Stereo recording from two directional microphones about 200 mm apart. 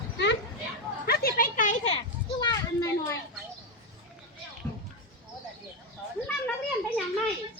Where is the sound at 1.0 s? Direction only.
50° left (ahead or behind).